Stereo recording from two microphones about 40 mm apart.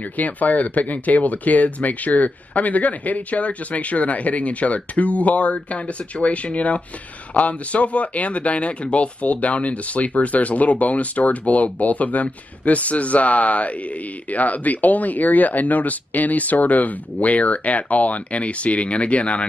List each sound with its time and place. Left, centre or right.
0.2 s speech: left